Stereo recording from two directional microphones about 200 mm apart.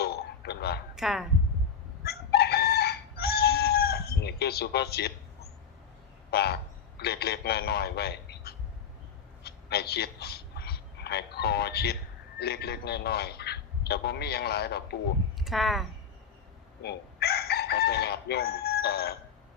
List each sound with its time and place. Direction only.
0.0 s a sound: 55° left (ahead or behind)
0.9 s speech: centre (ahead or behind)
2.0 s chicken: 55° left (ahead or behind)
6.3 s a man's voice: 55° left (ahead or behind)
9.4 s a sound: 55° left (ahead or behind)
12.4 s a man's voice: 55° left (ahead or behind)
15.4 s speech: centre (ahead or behind)
16.8 s crowing: 55° left (ahead or behind)